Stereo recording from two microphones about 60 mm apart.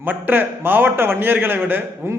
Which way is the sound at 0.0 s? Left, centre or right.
Right.